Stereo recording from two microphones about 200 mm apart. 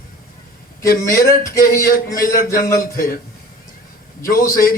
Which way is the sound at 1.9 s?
45° left (ahead or behind).